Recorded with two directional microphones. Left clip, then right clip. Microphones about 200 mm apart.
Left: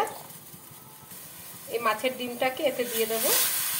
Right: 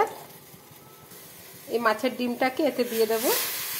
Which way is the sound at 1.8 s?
40° right (ahead or behind).